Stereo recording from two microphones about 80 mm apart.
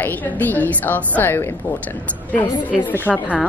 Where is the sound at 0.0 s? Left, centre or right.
Left.